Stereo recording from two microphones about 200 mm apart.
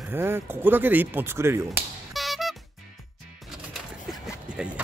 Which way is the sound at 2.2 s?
Centre (ahead or behind).